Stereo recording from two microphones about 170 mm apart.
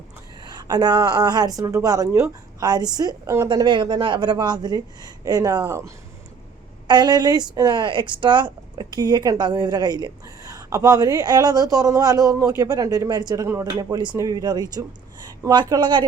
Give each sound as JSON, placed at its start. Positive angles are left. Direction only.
{"t": 0.4, "sound": "speech", "side_deg": -25}